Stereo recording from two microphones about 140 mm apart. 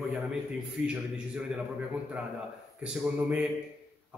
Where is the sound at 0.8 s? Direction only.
5° right (ahead or behind).